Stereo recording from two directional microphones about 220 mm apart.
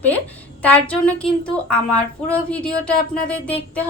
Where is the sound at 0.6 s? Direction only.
5° left (ahead or behind).